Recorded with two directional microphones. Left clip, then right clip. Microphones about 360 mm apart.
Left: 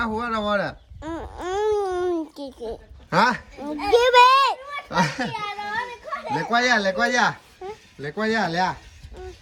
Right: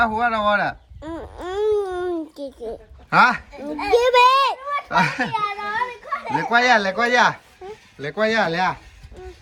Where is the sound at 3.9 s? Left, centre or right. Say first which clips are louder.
Even; centre.